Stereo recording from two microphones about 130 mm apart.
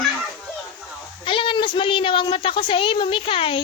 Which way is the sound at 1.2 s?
40° left (ahead or behind).